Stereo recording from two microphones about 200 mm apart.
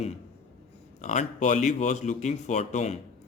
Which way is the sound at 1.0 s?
35° left (ahead or behind).